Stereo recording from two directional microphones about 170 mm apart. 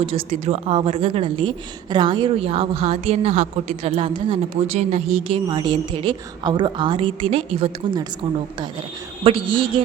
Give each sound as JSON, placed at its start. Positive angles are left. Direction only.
{"t": 0.0, "sound": "a woman's voice", "side_deg": -35}
{"t": 5.5, "sound": "a woman's voice", "side_deg": -30}
{"t": 9.2, "sound": "a woman's voice", "side_deg": -30}